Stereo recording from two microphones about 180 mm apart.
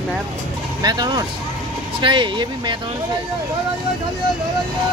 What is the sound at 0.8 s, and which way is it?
Speech, 25° right (ahead or behind).